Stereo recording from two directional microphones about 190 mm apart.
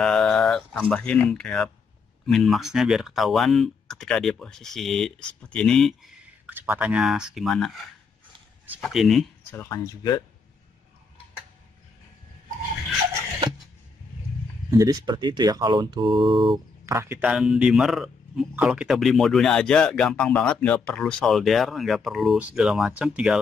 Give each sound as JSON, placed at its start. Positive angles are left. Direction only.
{"t": 0.0, "sound": "a man's voice", "side_deg": 5}
{"t": 8.8, "sound": "a man's voice", "side_deg": 0}
{"t": 9.5, "sound": "speech", "side_deg": 15}
{"t": 14.7, "sound": "speech", "side_deg": -20}
{"t": 16.8, "sound": "a man's voice", "side_deg": -15}